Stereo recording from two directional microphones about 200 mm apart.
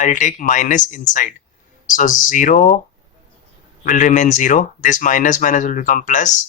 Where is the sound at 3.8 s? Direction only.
40° left (ahead or behind).